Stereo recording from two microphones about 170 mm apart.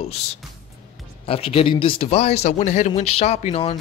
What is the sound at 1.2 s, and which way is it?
Speech, 35° left (ahead or behind).